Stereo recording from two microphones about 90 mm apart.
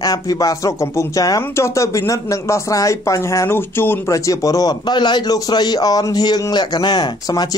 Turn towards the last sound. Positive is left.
turn(degrees=50)  # may be behind; listen again after turning